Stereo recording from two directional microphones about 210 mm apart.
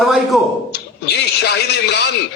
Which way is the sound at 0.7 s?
50° left (ahead or behind).